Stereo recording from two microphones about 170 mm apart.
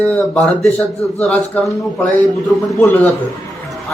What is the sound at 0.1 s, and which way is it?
Speech, 5° left (ahead or behind).